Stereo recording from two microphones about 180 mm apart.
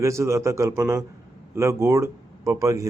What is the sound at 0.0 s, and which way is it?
A man's voice, 15° right (ahead or behind).